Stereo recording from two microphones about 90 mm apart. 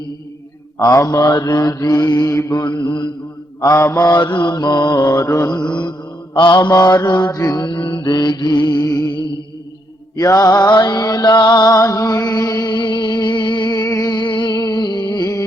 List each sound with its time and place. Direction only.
0.8 s mantra: 40° left (ahead or behind); by 3.1 s 55° left (ahead or behind)
3.6 s mantra: 35° left (ahead or behind)
4.0 s mantra: 50° left (ahead or behind)
7.6 s mantra: 65° left (ahead or behind); by 9.1 s 45° left (ahead or behind)
10.2 s music: 40° left (ahead or behind)